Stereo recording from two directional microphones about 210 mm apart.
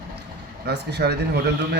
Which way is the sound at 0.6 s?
50° right (ahead or behind).